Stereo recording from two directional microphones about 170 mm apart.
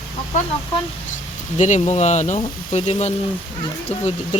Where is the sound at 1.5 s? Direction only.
45° left (ahead or behind).